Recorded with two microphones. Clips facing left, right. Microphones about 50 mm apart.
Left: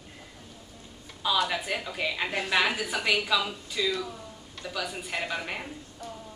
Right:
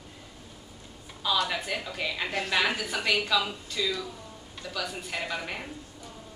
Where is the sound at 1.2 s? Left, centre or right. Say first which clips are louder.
Left 1 dB; centre.